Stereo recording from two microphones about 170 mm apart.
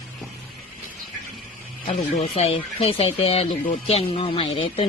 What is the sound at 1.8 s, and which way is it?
Speech, 35° left (ahead or behind).